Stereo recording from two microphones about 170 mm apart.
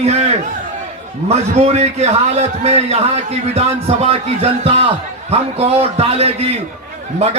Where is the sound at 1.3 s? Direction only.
40° right (ahead or behind).